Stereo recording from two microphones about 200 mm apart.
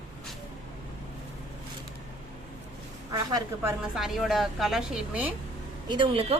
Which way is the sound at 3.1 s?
20° right (ahead or behind).